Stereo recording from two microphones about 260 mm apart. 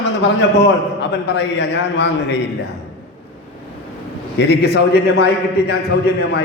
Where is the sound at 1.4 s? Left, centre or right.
Left.